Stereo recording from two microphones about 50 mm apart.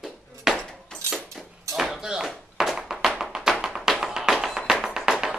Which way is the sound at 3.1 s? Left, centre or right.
Centre.